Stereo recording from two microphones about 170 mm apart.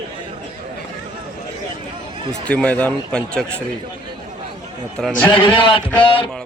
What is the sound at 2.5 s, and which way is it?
Speech, 5° left (ahead or behind).